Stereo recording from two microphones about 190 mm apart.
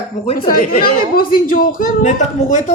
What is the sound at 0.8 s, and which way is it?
A woman's voice, 50° left (ahead or behind).